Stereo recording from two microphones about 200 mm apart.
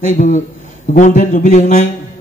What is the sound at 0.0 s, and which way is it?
A man's voice, 40° left (ahead or behind).